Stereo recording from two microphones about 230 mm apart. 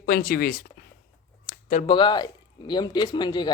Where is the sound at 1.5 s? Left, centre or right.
Left.